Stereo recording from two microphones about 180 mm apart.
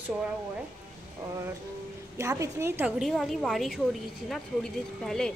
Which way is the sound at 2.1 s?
15° right (ahead or behind).